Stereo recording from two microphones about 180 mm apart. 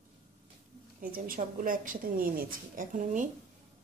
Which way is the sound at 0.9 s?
50° right (ahead or behind).